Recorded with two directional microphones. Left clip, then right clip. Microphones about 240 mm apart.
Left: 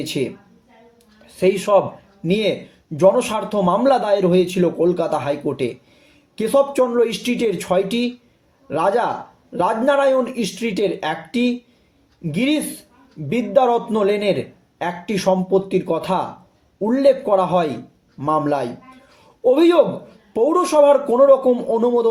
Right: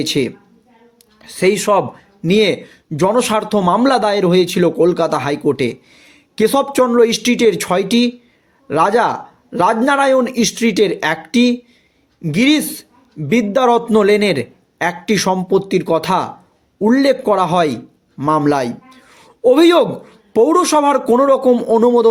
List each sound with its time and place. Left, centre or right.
0.0 s a man's voice: right